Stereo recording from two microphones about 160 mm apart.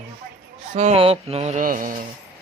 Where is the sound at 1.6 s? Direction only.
60° right (ahead or behind).